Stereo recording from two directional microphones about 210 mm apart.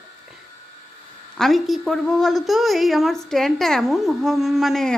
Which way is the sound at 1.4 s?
Centre (ahead or behind).